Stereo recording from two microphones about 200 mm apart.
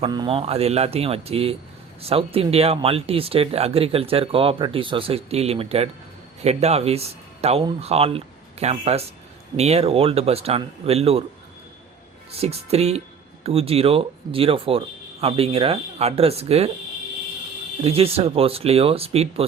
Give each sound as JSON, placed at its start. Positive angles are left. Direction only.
{"t": 0.0, "sound": "a man's voice", "side_deg": -25}
{"t": 12.4, "sound": "a man's voice", "side_deg": -30}
{"t": 17.7, "sound": "speech", "side_deg": -30}